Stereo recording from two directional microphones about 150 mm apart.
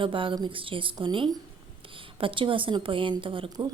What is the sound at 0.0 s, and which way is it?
A woman's voice, 35° right (ahead or behind).